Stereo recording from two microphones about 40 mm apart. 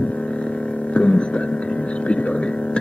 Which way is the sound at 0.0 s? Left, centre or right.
Left.